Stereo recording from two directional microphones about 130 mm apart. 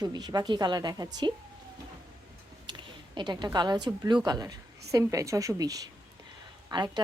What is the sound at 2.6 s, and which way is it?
Speech, 35° right (ahead or behind).